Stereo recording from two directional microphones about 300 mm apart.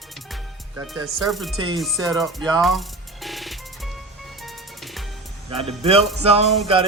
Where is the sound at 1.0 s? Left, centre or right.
Centre.